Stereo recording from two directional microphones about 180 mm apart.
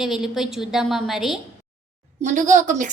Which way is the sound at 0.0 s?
Centre (ahead or behind).